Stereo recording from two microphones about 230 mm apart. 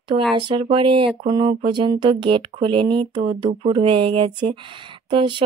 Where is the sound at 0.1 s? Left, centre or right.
Right.